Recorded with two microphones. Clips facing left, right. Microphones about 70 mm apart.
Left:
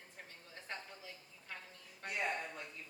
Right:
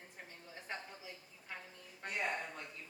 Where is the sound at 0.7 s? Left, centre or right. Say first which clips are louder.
Right 2 dB; centre.